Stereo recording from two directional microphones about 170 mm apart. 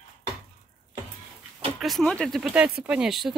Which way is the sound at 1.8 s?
Centre (ahead or behind).